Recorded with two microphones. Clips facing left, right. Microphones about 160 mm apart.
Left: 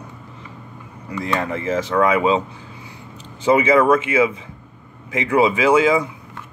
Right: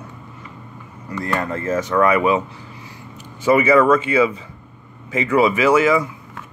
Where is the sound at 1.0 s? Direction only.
10° left (ahead or behind).